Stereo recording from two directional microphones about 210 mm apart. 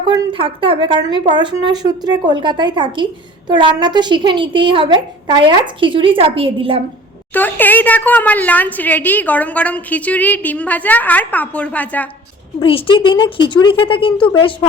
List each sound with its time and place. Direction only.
0.1 s a woman's voice: 25° right (ahead or behind)
7.3 s a woman's voice: 10° left (ahead or behind)
12.5 s speech: 25° left (ahead or behind)